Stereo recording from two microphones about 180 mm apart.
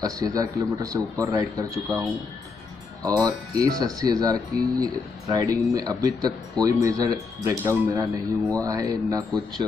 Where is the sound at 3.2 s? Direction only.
20° right (ahead or behind).